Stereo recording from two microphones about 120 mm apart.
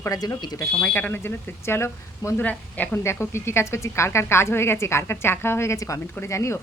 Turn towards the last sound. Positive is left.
turn(degrees=25)  # may be behind; listen again after turning